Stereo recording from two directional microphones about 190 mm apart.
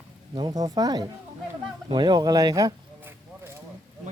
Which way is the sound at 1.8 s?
25° right (ahead or behind).